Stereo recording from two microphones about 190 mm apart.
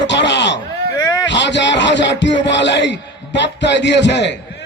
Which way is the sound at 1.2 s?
70° left (ahead or behind).